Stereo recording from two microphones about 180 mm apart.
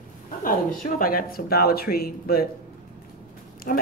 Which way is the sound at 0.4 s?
50° left (ahead or behind).